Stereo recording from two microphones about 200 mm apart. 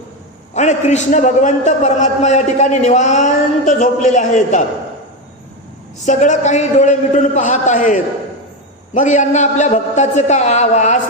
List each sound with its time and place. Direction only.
0.5 s a man's voice: 35° left (ahead or behind)
6.1 s a man's voice: 35° left (ahead or behind)